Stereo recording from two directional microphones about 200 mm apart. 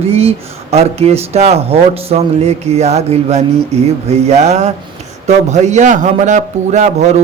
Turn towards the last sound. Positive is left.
turn(degrees=-35)  # may be behind; listen again after turning